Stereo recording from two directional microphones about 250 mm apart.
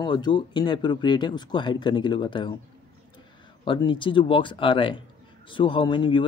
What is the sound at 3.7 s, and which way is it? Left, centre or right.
Speech, centre.